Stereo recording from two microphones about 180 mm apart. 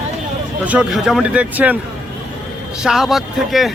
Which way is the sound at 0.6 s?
5° right (ahead or behind).